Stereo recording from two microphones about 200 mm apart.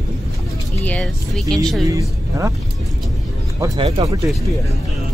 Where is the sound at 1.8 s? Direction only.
15° right (ahead or behind).